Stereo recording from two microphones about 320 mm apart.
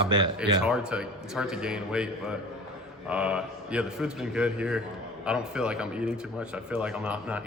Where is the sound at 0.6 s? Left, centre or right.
Centre.